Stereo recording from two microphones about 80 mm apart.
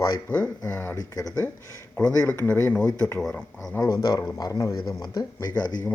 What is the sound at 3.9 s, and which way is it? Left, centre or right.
Speech, left.